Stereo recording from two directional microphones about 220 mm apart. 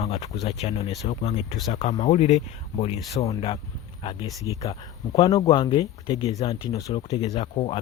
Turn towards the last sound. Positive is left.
turn(degrees=25)  # may be behind; listen again after turning